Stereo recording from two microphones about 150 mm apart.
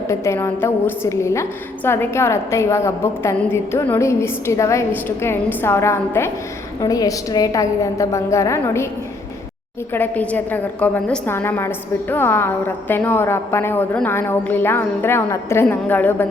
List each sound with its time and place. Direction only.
0.1 s a woman's voice: 20° left (ahead or behind)
9.9 s a woman's voice: 10° left (ahead or behind)